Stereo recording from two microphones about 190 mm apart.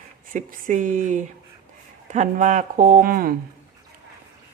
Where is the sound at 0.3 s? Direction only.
40° right (ahead or behind).